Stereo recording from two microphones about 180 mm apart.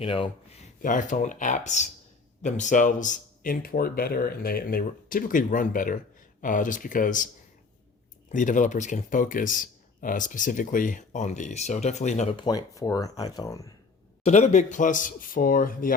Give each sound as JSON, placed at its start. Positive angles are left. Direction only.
{"t": 0.0, "sound": "speech", "side_deg": 30}
{"t": 8.3, "sound": "speech", "side_deg": 45}
{"t": 12.4, "sound": "speech", "side_deg": 20}
{"t": 14.3, "sound": "speech", "side_deg": 40}